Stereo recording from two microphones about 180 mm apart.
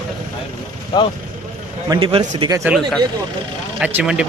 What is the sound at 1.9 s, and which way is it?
Speech, 25° right (ahead or behind).